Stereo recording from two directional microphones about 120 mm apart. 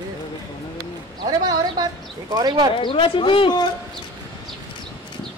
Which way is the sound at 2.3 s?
40° right (ahead or behind).